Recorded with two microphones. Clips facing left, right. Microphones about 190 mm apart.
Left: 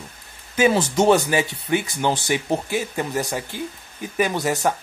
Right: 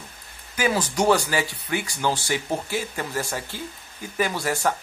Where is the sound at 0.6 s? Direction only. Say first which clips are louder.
Left 5 dB; 25° left (ahead or behind).